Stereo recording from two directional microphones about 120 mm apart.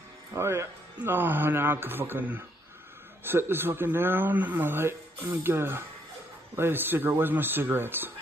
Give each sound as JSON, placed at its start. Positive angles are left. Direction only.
{"t": 0.3, "sound": "a man's voice", "side_deg": -25}